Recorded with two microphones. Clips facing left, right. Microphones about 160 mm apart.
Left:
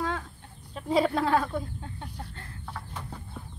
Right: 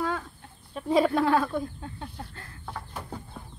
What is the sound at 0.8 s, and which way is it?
Speech, 25° left (ahead or behind).